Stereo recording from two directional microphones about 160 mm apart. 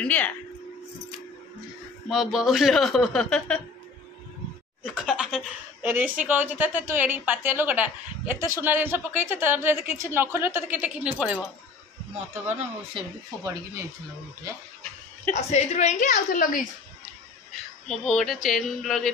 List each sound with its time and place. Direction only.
0.0 s speech: 10° left (ahead or behind)
2.0 s speech: centre (ahead or behind)
4.8 s a woman's voice: 5° right (ahead or behind)
13.4 s speech: 20° right (ahead or behind)
15.3 s a woman's voice: 45° left (ahead or behind)
17.8 s speech: centre (ahead or behind)